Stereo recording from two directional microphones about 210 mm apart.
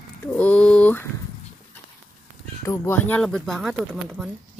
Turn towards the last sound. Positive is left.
turn(degrees=-5)  # may be behind; listen again after turning